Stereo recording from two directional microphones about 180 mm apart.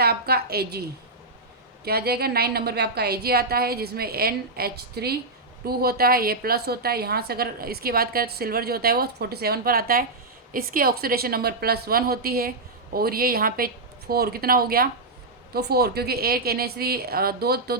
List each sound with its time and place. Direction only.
0.0 s a woman's voice: 60° right (ahead or behind)